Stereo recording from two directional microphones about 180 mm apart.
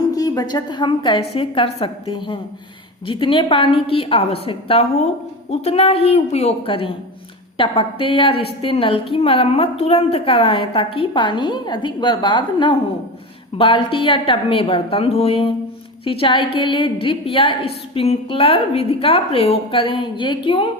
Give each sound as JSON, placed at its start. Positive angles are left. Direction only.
{"t": 0.1, "sound": "a woman's voice", "side_deg": 20}